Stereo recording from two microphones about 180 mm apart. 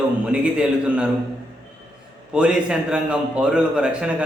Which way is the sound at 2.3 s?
5° right (ahead or behind).